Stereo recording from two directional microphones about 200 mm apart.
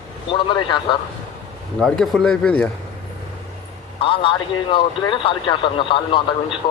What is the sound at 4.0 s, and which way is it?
A man's voice, 25° left (ahead or behind).